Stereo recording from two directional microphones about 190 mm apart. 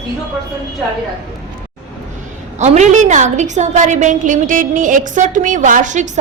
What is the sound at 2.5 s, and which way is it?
A woman's voice, 40° right (ahead or behind).